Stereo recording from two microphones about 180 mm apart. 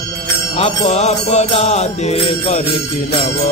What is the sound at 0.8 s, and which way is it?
Music, 40° left (ahead or behind).